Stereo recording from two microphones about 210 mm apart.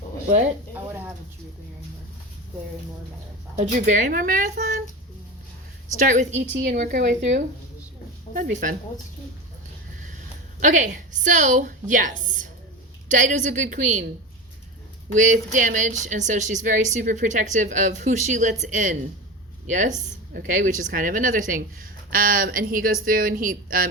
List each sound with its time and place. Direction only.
3.5 s a woman's voice: 35° right (ahead or behind)
6.0 s a woman's voice: 35° right (ahead or behind)
6.4 s a woman's voice: 55° right (ahead or behind)
6.7 s a woman's voice: 40° right (ahead or behind)
8.3 s a woman's voice: 40° right (ahead or behind)
10.6 s a woman's voice: 35° right (ahead or behind)
15.1 s a woman's voice: 35° right (ahead or behind)